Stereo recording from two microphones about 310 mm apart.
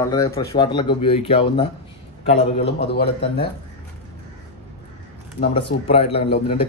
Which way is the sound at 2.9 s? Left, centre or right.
Left.